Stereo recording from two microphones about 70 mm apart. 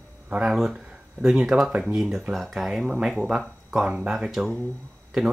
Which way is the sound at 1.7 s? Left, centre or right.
Centre.